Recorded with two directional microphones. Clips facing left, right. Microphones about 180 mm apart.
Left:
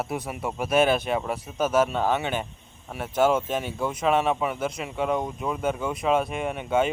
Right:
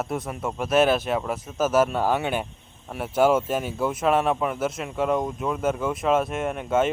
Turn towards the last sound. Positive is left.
turn(degrees=0)  # may be behind; listen again after turning